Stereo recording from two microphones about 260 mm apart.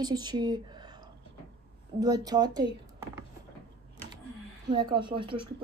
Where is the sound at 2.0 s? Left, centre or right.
Centre.